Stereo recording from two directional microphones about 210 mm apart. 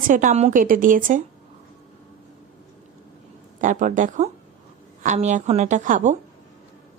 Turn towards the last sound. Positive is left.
turn(degrees=-35)  # may be behind; listen again after turning